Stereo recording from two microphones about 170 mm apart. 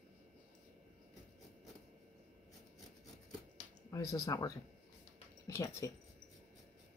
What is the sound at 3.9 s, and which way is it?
Speech, 20° left (ahead or behind).